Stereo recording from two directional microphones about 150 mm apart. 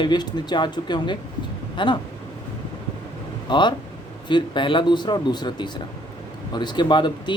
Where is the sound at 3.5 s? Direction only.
30° left (ahead or behind).